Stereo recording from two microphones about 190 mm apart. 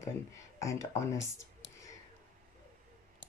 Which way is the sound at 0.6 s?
15° left (ahead or behind).